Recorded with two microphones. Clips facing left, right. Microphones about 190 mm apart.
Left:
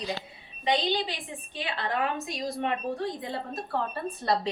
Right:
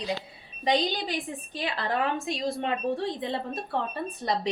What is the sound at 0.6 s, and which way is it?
A woman's voice, 40° right (ahead or behind).